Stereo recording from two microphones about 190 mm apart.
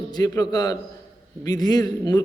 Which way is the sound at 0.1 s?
20° left (ahead or behind).